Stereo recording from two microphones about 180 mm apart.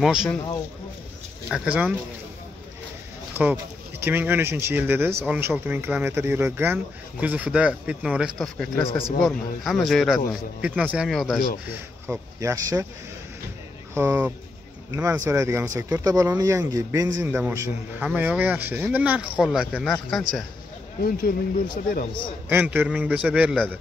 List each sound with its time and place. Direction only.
0.0 s a man's voice: 5° right (ahead or behind)
1.5 s a man's voice: 5° right (ahead or behind)
4.0 s a man's voice: 10° right (ahead or behind)
11.7 s speech: 15° right (ahead or behind)
13.9 s a man's voice: 15° right (ahead or behind)
21.0 s speech: 55° left (ahead or behind)
22.5 s speech: 10° right (ahead or behind)